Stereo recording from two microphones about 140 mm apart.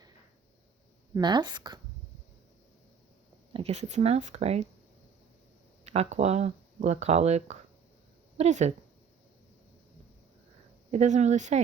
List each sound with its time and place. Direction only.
1.1 s a woman's voice: 30° right (ahead or behind)
3.5 s speech: 50° right (ahead or behind)
5.8 s speech: 50° right (ahead or behind)
10.9 s speech: 55° right (ahead or behind)